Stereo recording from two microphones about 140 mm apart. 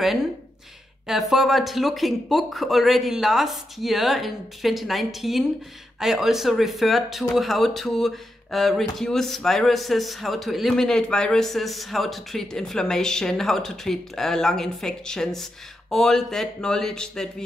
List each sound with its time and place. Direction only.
1.0 s speech: centre (ahead or behind)